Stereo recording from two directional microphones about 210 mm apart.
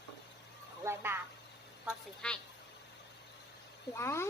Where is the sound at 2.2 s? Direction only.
5° left (ahead or behind).